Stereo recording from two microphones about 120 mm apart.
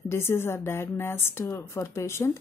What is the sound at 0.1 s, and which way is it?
A woman's voice, 20° left (ahead or behind).